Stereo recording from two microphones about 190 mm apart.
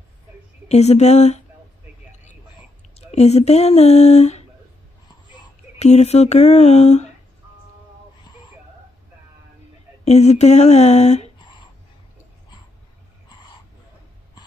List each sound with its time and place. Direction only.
0.7 s speech: 35° left (ahead or behind)
3.0 s speech: 35° left (ahead or behind)
5.8 s speech: 35° left (ahead or behind)
8.2 s a sound: 25° left (ahead or behind)
10.0 s speech: 35° left (ahead or behind)
11.3 s a sound: 25° left (ahead or behind)